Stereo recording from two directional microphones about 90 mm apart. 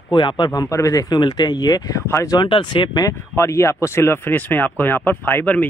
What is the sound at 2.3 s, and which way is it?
Speech, 65° left (ahead or behind).